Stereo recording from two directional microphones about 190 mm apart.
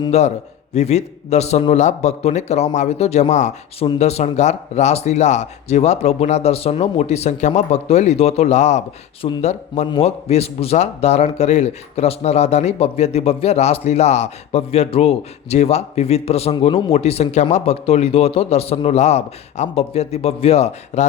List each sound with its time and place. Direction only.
0.1 s a man's voice: 35° left (ahead or behind)